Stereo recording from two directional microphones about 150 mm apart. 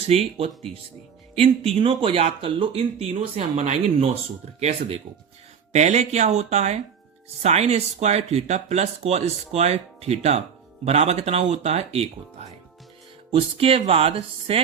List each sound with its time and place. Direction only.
0.1 s speech: 45° right (ahead or behind)
5.7 s speech: 50° right (ahead or behind)
13.3 s speech: 40° right (ahead or behind)